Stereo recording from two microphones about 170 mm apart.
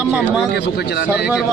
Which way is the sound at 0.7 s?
75° left (ahead or behind).